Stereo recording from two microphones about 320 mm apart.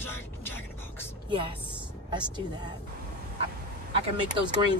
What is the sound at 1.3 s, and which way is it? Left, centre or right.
Speech, centre.